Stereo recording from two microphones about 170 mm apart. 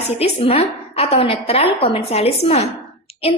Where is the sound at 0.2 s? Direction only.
35° left (ahead or behind).